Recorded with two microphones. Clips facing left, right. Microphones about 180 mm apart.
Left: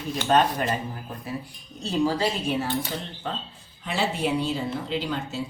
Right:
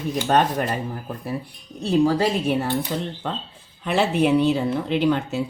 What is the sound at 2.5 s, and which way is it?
Speech, 60° right (ahead or behind).